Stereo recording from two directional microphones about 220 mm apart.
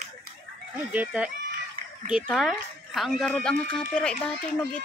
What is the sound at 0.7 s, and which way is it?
A man's voice, 5° right (ahead or behind).